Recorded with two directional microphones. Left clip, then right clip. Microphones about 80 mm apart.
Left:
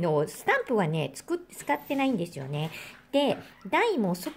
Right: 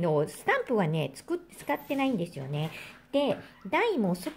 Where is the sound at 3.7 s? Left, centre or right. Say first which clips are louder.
Left 2 dB; left.